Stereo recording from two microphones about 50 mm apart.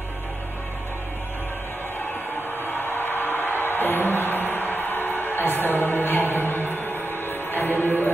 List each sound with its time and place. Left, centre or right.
2.6 s music: left